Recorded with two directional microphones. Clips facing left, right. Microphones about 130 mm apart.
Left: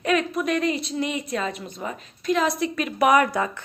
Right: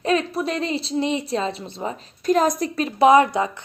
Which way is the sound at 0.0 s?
30° right (ahead or behind).